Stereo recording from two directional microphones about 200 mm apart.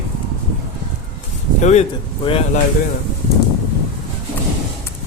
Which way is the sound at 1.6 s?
35° left (ahead or behind).